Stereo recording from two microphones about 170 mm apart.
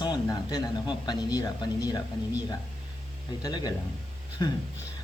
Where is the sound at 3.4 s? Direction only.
25° left (ahead or behind).